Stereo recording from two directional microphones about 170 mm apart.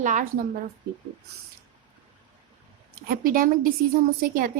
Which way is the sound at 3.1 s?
55° right (ahead or behind).